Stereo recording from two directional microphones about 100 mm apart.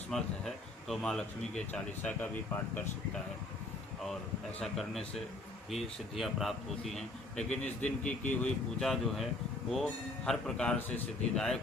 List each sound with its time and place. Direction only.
0.1 s a man's voice: 5° left (ahead or behind)
2.0 s speech: 15° left (ahead or behind)
4.6 s a man's voice: centre (ahead or behind)
10.8 s speech: 20° left (ahead or behind)
11.3 s a man's voice: 5° left (ahead or behind)